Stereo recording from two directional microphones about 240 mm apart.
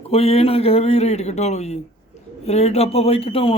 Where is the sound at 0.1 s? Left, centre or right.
Left.